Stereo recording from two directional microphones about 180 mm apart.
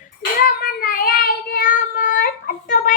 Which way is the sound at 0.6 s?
50° left (ahead or behind).